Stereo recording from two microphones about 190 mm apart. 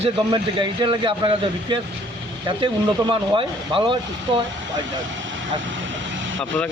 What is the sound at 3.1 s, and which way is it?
A man's voice, 30° right (ahead or behind).